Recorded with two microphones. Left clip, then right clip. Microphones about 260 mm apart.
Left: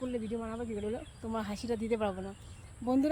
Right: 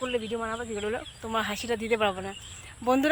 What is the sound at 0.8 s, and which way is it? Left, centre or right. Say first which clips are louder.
Speech: right 6 dB; centre.